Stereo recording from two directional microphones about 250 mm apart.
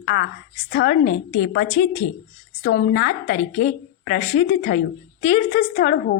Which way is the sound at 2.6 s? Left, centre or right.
Left.